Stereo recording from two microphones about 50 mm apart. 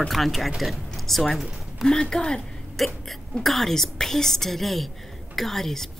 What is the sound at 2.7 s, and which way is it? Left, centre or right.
A woman's voice, centre.